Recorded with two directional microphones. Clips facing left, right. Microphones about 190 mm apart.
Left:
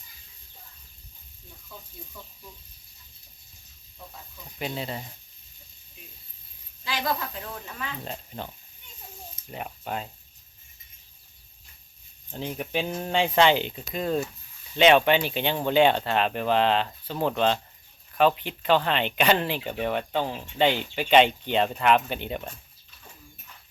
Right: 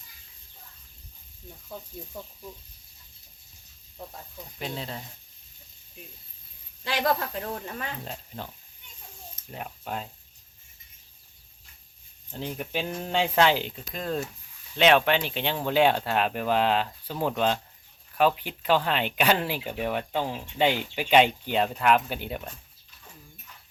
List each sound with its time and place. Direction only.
4.6 s speech: 5° left (ahead or behind)
6.9 s speech: 50° right (ahead or behind)
8.0 s speech: centre (ahead or behind)
9.5 s speech: 5° left (ahead or behind)
12.3 s speech: 5° left (ahead or behind)
13.1 s speech: 5° right (ahead or behind)